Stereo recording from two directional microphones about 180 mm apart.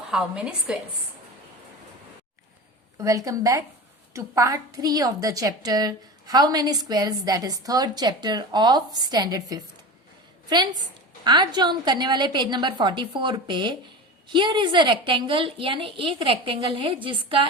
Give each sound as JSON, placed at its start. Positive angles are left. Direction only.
{"t": 0.1, "sound": "a woman's voice", "side_deg": -5}
{"t": 3.0, "sound": "a woman's voice", "side_deg": -20}
{"t": 11.2, "sound": "a woman's voice", "side_deg": -25}